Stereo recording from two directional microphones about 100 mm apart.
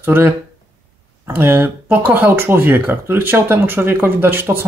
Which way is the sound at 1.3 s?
20° right (ahead or behind).